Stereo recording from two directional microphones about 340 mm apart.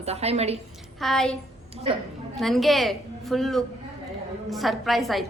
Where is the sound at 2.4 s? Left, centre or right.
Centre.